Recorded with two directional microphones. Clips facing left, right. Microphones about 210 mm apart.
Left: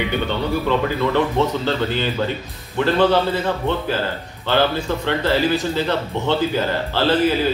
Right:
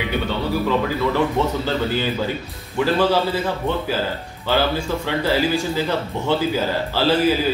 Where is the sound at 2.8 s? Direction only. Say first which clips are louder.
Left 2 dB; 5° right (ahead or behind).